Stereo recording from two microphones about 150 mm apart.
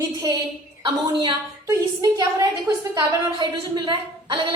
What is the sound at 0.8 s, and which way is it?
Speech, 35° right (ahead or behind).